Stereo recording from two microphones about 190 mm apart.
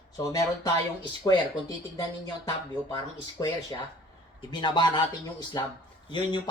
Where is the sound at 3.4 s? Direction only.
20° left (ahead or behind).